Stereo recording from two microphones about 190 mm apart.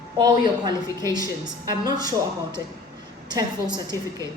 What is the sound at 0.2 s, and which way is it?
Speech, 20° right (ahead or behind).